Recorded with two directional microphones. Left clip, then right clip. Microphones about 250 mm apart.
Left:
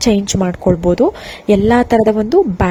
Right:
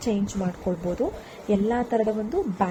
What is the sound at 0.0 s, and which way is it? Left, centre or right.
Speech, left.